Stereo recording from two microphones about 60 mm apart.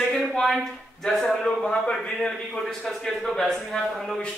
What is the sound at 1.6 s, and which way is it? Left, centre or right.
Speech, centre.